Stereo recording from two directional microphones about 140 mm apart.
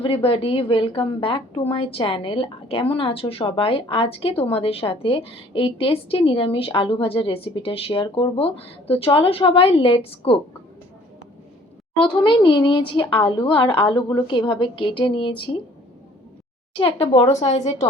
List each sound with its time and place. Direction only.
0.0 s a woman's voice: 40° left (ahead or behind)
11.9 s a woman's voice: 35° left (ahead or behind)
16.8 s speech: 45° left (ahead or behind)